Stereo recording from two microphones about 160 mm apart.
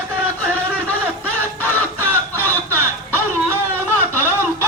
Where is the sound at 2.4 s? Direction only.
15° right (ahead or behind).